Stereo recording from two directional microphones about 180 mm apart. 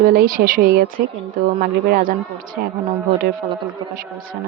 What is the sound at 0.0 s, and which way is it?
A woman's voice, 55° right (ahead or behind).